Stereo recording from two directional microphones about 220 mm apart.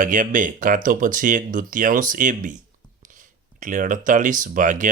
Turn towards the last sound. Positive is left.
turn(degrees=-35)  # may be behind; listen again after turning